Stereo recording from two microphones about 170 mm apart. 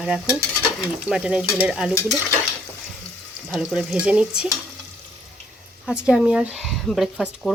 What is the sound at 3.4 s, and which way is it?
Speech, centre (ahead or behind).